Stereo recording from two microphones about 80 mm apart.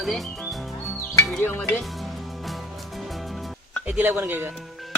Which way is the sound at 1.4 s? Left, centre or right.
Left.